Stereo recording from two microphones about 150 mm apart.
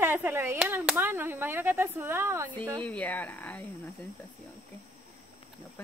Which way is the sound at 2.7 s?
10° left (ahead or behind).